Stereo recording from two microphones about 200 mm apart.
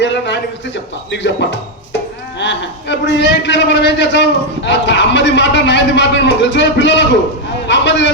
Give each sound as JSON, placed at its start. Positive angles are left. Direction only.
{"t": 0.0, "sound": "a man's voice", "side_deg": 60}